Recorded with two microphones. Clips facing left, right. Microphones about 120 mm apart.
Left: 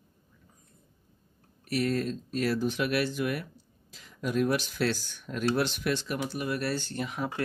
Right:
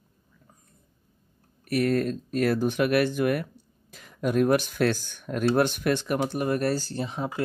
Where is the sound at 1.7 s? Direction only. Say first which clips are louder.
Right 5 dB; 55° right (ahead or behind).